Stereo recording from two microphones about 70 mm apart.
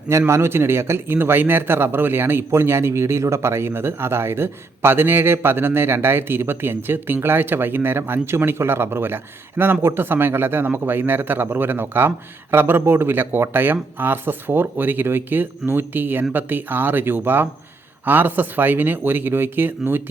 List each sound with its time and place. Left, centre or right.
0.1 s a man's voice: right